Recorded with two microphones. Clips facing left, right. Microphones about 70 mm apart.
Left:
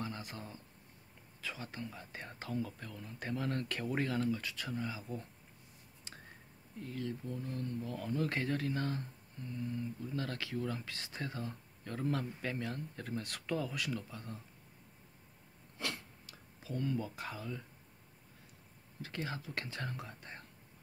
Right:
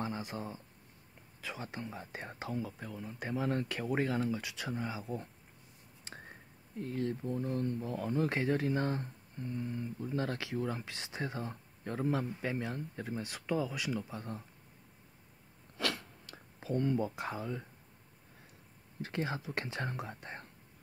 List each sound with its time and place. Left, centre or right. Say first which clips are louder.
0.1 s speech: right 6 dB; centre
6.0 s a sound: right 5 dB; right
6.8 s speech: right 5 dB; right; by 14.0 s centre
14.1 s speech: right 5 dB; right
16.3 s a sound: right 8 dB; right
17.1 s speech: right 5 dB; right
18.9 s speech: right 5 dB; right